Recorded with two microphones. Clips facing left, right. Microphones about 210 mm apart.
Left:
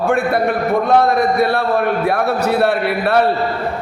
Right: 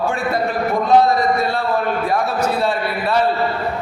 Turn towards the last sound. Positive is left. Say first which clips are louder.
# left 4 dB
turn(degrees=65)  # may be behind; listen again after turning